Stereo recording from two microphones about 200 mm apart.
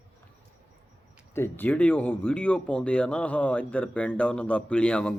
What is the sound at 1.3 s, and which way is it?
Speech, 10° left (ahead or behind).